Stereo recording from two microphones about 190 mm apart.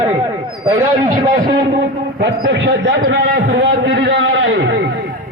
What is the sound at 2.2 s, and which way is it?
A man's voice, 60° right (ahead or behind).